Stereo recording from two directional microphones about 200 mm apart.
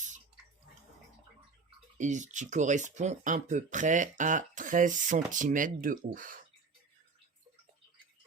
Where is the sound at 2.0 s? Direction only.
35° right (ahead or behind).